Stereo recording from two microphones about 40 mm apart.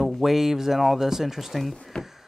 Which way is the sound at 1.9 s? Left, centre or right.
Left.